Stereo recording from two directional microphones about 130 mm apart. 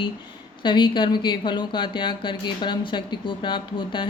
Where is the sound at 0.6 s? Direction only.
35° left (ahead or behind).